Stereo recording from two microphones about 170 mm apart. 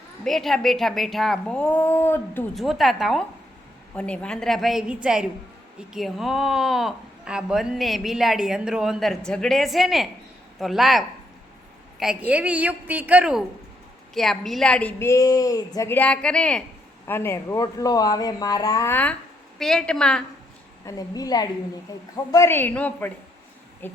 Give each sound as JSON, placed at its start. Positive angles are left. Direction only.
{"t": 0.3, "sound": "speech", "side_deg": 0}
{"t": 2.6, "sound": "a woman's voice", "side_deg": 0}
{"t": 20.8, "sound": "a woman's voice", "side_deg": 20}